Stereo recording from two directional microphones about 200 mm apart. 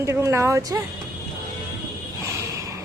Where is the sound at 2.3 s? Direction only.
15° right (ahead or behind).